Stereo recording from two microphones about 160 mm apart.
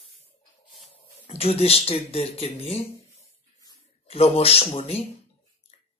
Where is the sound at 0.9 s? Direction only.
40° left (ahead or behind).